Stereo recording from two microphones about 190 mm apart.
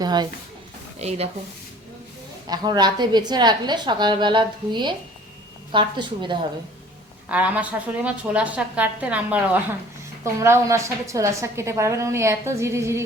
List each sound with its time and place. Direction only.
0.0 s a sound: 20° right (ahead or behind)
0.9 s speech: 35° right (ahead or behind)
2.5 s a woman's voice: 20° right (ahead or behind)
7.3 s a woman's voice: 5° right (ahead or behind)